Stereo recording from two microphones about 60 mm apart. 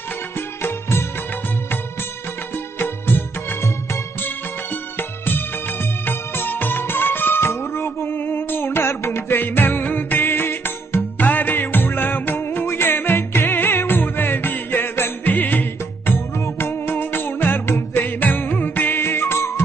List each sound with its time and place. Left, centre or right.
0.3 s music: left
2.7 s music: left